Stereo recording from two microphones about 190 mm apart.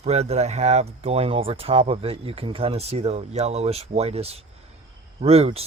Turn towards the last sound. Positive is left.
turn(degrees=-30)  # may be behind; listen again after turning